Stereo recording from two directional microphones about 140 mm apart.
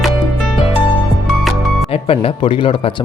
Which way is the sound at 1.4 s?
Centre (ahead or behind).